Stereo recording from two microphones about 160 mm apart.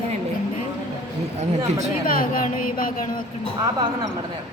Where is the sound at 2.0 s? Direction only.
60° left (ahead or behind).